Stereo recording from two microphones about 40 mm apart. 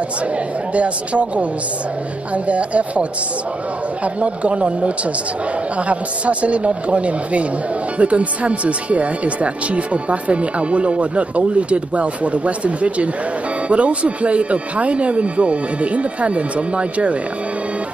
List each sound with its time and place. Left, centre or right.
0.7 s speech: right